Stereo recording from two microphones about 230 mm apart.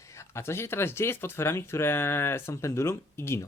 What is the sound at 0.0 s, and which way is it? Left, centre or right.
Speech, centre.